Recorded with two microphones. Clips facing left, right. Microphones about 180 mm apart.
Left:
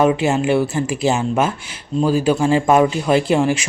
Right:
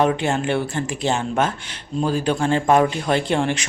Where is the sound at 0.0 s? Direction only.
5° left (ahead or behind).